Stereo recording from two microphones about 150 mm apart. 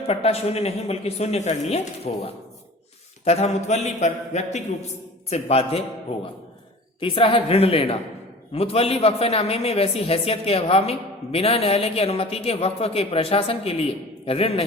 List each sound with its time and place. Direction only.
0.1 s a man's voice: 40° left (ahead or behind)
7.0 s a man's voice: 35° left (ahead or behind)